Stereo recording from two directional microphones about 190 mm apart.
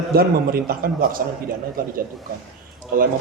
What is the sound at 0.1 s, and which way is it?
A man's voice, 50° right (ahead or behind).